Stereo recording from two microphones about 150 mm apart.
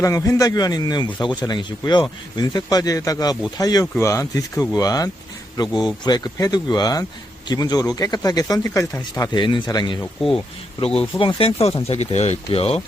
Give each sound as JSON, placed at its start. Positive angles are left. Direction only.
{"t": 0.0, "sound": "speech", "side_deg": 20}